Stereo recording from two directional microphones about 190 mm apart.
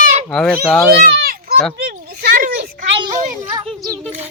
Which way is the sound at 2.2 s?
50° right (ahead or behind).